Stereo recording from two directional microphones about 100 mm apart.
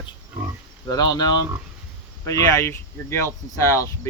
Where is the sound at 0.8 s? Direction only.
40° left (ahead or behind).